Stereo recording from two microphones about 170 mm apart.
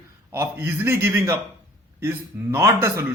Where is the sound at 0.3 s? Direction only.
15° right (ahead or behind).